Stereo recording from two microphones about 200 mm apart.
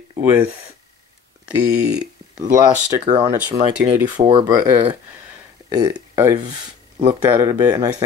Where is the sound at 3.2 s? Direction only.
10° right (ahead or behind).